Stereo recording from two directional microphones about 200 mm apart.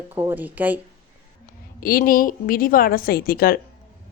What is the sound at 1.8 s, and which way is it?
A woman's voice, 45° left (ahead or behind).